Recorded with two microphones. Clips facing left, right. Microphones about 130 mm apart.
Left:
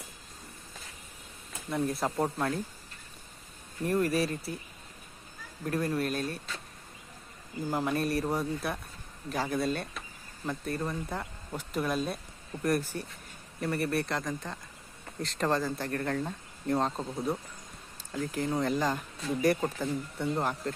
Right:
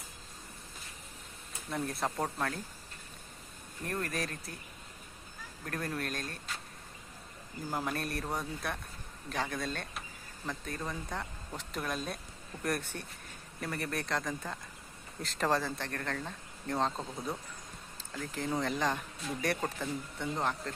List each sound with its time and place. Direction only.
1.7 s speech: centre (ahead or behind)
2.2 s speech: 15° left (ahead or behind)
3.8 s speech: 10° left (ahead or behind)
5.6 s speech: 5° left (ahead or behind)
7.7 s speech: centre (ahead or behind)
18.1 s speech: 5° left (ahead or behind)